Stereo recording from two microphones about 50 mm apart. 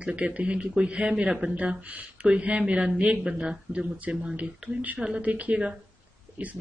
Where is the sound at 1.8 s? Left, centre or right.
Right.